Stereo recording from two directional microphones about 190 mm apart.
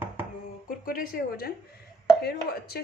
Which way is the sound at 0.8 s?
50° left (ahead or behind).